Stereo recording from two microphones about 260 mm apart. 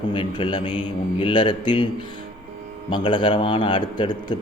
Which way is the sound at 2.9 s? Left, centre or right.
Centre.